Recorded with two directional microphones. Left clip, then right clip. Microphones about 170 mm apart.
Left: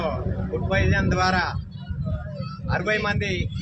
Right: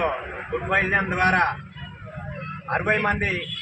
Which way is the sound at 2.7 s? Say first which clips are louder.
Right 2 dB; 15° left (ahead or behind).